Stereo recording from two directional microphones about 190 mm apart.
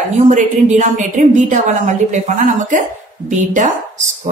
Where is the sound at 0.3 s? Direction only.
40° right (ahead or behind).